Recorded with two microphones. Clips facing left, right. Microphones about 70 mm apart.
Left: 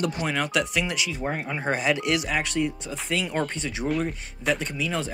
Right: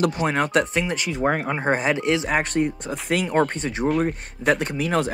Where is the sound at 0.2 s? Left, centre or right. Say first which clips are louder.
Right 5 dB; right.